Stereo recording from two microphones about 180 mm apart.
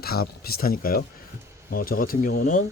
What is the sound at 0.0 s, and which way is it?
Speech, 60° left (ahead or behind).